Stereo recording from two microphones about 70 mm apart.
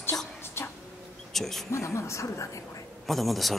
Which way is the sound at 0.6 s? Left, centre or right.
Left.